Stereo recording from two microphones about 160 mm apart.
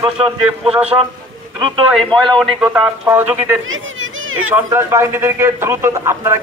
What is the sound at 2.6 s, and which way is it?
A man's voice, 10° right (ahead or behind).